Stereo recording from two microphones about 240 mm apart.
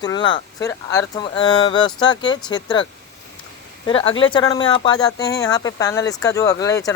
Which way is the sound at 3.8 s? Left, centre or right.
Left.